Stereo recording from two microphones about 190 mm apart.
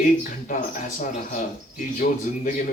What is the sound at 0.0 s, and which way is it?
Speech, 45° left (ahead or behind).